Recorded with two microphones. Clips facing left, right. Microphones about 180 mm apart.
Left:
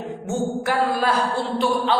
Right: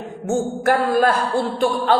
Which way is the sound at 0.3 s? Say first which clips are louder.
Right 5 dB; 50° right (ahead or behind).